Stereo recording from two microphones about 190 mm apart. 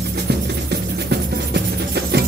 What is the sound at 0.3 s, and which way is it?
Music, 60° right (ahead or behind).